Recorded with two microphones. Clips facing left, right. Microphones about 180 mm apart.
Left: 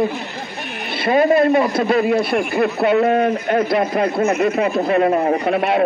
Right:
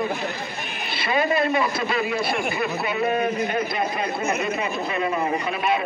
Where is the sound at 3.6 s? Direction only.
80° left.